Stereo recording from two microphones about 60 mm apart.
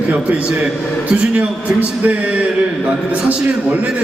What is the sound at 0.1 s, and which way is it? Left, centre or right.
A man's voice, right.